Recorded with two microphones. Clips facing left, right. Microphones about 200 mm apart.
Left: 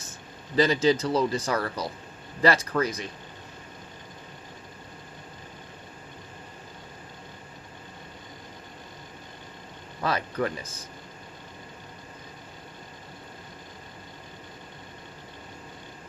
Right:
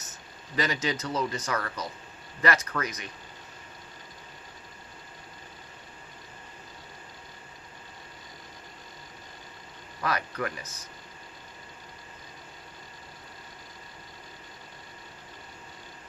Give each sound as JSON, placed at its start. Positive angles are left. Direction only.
{"t": 0.5, "sound": "speech", "side_deg": 30}
{"t": 10.0, "sound": "speech", "side_deg": 30}